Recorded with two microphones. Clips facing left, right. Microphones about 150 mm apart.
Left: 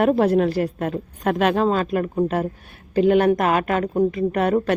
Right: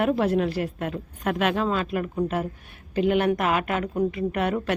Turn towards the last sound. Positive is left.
turn(degrees=40)  # may be behind; listen again after turning